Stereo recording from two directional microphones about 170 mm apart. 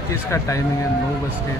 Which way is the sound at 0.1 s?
15° left (ahead or behind).